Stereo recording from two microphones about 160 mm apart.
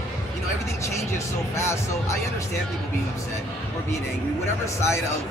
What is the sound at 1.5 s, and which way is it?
Speech, 15° left (ahead or behind).